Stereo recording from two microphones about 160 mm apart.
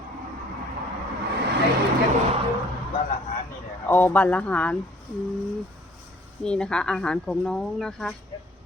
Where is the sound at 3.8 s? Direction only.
10° left (ahead or behind).